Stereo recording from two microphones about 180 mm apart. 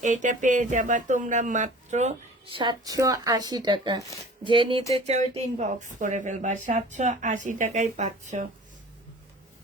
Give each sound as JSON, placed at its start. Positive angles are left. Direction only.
{"t": 0.0, "sound": "speech", "side_deg": -45}
{"t": 2.6, "sound": "a woman's voice", "side_deg": -20}